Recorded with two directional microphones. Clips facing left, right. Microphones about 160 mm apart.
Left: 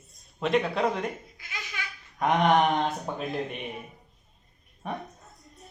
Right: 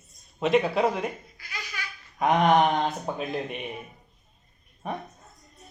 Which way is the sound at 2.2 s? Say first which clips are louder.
Right 2 dB; centre (ahead or behind).